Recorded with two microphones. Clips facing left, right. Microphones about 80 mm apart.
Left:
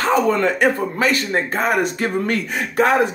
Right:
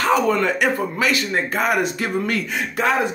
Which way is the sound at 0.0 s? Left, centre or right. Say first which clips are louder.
Left 1 dB; left.